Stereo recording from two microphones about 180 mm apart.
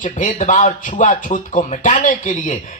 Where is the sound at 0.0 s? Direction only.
45° left (ahead or behind).